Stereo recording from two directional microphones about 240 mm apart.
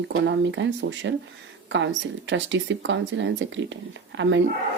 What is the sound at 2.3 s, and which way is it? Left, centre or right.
Speech, right.